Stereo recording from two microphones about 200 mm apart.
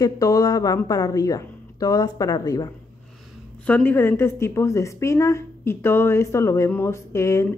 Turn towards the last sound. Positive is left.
turn(degrees=15)  # may be behind; listen again after turning